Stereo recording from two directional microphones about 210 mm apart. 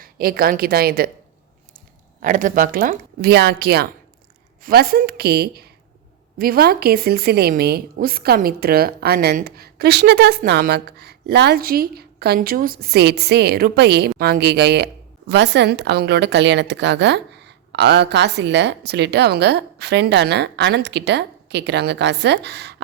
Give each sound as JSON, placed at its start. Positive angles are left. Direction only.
{"t": 0.0, "sound": "a woman's voice", "side_deg": -45}
{"t": 2.2, "sound": "a woman's voice", "side_deg": -40}